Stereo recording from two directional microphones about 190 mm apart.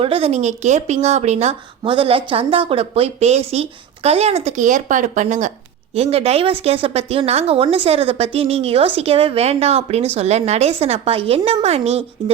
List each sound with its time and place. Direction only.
0.0 s speech: 30° right (ahead or behind)